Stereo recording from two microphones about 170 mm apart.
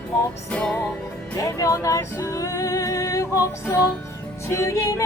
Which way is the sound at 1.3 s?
20° left (ahead or behind).